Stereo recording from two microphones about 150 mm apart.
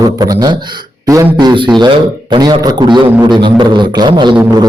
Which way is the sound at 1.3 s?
30° right (ahead or behind).